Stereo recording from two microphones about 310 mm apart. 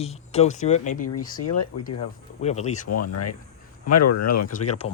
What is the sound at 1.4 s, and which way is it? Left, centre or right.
Speech, left.